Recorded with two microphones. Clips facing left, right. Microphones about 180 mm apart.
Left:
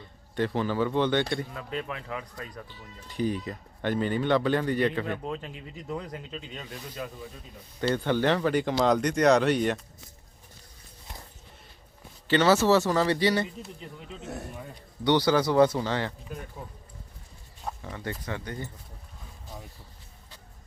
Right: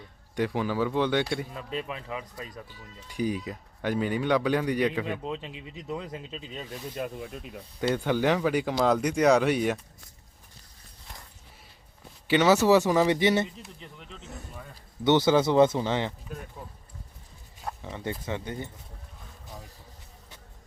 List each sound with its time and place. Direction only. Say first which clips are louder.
0.0 s a man's voice: even; 10° right (ahead or behind)
5.9 s speech: even; 20° right (ahead or behind)
7.0 s speech: right 5 dB; 65° right (ahead or behind)
7.8 s speech: even; 5° right (ahead or behind)
12.3 s speech: right 1 dB; 15° right (ahead or behind)
14.2 s speech: left 8 dB; 65° left (ahead or behind)
15.0 s speech: right 2 dB; 20° right (ahead or behind)
17.8 s speech: right 3 dB; 20° right (ahead or behind)